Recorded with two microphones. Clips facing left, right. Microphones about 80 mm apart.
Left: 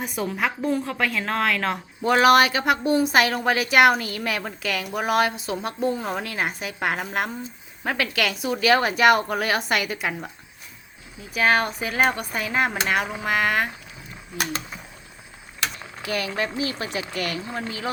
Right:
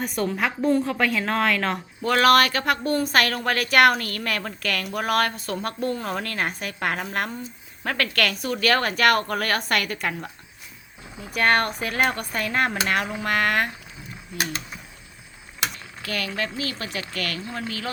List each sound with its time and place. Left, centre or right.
0.0 s a woman's voice: centre
2.0 s a woman's voice: centre
11.3 s a woman's voice: centre
15.8 s speech: left